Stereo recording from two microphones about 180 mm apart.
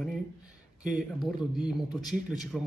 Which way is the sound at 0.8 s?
5° right (ahead or behind).